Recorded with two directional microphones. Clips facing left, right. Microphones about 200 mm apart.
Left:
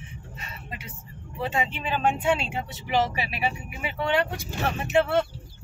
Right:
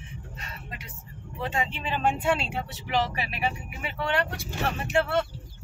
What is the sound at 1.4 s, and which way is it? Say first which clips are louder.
Speech: left 2 dB; 10° left (ahead or behind).